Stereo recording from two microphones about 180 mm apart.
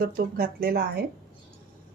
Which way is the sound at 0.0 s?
55° right (ahead or behind).